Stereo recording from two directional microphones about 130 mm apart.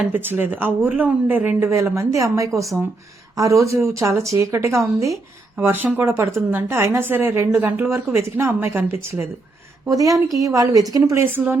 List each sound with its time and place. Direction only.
0.0 s speech: 15° right (ahead or behind)